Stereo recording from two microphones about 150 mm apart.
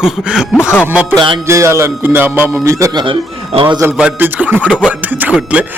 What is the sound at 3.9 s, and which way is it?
Music, 10° right (ahead or behind).